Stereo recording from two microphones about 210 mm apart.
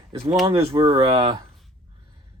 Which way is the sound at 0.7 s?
25° right (ahead or behind).